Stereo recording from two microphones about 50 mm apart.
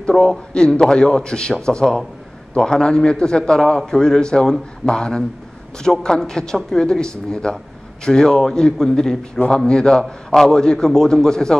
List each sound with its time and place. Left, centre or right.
0.1 s speech: centre